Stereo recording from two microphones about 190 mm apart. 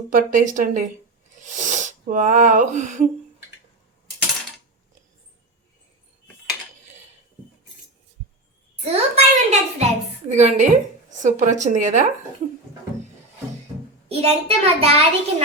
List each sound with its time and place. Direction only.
0.1 s speech: 45° right (ahead or behind)
1.4 s wheeze: 40° right (ahead or behind)
8.8 s a sound: 35° right (ahead or behind)
10.2 s a child's voice: 40° right (ahead or behind)
14.1 s a child's voice: 35° right (ahead or behind)